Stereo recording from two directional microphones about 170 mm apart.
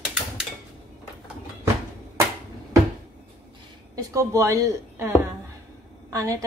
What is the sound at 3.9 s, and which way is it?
A woman's voice, 20° right (ahead or behind).